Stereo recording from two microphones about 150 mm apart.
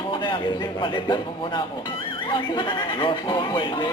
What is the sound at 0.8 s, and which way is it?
A man's voice, 30° left (ahead or behind).